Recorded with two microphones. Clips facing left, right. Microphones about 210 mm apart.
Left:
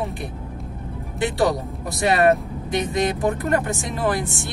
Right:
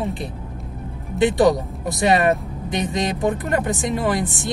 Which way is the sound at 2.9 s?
20° right (ahead or behind).